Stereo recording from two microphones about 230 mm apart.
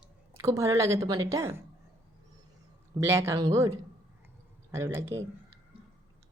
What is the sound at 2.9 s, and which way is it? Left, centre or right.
Speech, centre.